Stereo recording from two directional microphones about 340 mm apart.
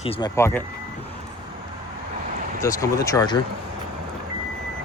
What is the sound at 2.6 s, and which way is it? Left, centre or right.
Speech, centre.